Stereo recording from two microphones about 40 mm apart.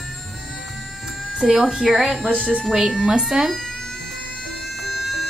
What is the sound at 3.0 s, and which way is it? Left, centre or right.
Speech, centre.